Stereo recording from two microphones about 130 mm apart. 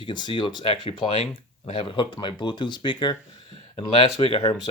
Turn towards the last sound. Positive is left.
turn(degrees=45)  # may be behind; listen again after turning